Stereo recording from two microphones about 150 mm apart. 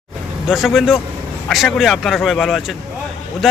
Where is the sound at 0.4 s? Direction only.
Centre (ahead or behind).